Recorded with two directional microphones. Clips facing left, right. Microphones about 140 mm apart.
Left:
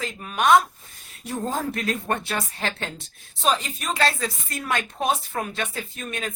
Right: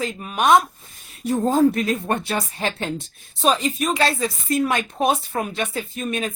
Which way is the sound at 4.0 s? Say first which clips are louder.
Right 3 dB; 20° right (ahead or behind).